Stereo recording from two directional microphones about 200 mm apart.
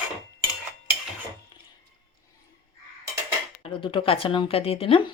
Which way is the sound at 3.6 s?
25° left (ahead or behind).